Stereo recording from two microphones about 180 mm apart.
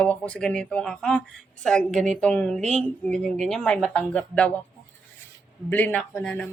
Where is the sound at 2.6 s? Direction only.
40° right (ahead or behind).